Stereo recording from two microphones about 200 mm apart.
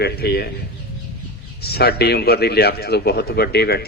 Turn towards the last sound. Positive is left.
turn(degrees=50)  # may be behind; listen again after turning